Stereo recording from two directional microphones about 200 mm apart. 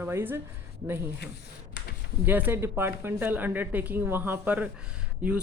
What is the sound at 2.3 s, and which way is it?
Speech, 10° right (ahead or behind).